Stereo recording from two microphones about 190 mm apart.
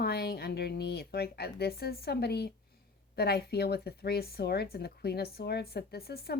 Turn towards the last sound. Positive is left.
turn(degrees=55)  # may be behind; listen again after turning